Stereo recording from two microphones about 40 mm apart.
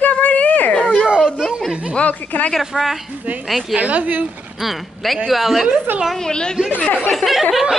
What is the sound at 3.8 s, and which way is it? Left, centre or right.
Speech, right.